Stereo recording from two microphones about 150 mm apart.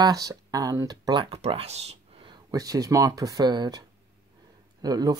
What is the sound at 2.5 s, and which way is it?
Speech, 25° right (ahead or behind).